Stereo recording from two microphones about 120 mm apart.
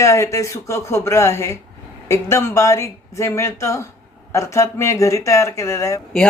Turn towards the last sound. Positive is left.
turn(degrees=25)  # may be behind; listen again after turning